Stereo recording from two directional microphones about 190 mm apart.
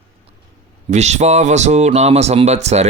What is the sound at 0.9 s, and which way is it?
Speech, 35° right (ahead or behind).